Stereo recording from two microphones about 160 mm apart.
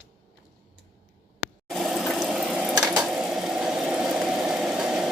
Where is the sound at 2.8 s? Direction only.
Centre (ahead or behind).